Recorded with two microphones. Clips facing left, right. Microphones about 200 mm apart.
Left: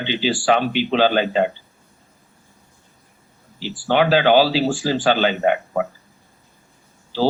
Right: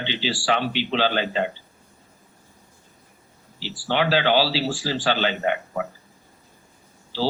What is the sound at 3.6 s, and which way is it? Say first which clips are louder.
Speech: left 5 dB; 50° left (ahead or behind).